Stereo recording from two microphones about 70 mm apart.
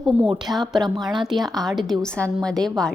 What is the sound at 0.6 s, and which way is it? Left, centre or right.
Speech, right.